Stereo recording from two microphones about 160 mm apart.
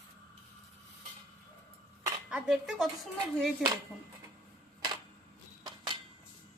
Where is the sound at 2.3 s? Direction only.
5° right (ahead or behind).